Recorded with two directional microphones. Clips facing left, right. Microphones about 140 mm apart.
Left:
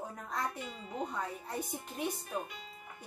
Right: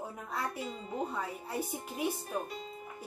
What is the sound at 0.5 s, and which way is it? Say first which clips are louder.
Speech: right 3 dB; 35° right (ahead or behind).